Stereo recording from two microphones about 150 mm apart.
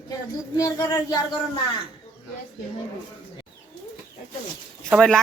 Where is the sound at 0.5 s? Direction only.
25° left (ahead or behind).